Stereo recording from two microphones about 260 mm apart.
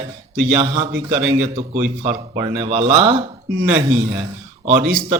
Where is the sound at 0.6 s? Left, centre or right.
Right.